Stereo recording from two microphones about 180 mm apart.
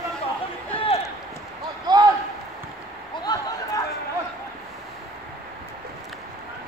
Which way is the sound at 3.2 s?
20° left (ahead or behind).